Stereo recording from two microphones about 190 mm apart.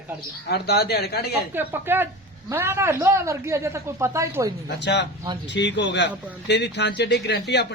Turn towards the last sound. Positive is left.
turn(degrees=65)  # may be behind; listen again after turning